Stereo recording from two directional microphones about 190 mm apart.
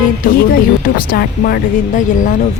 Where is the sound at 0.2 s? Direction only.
50° left (ahead or behind).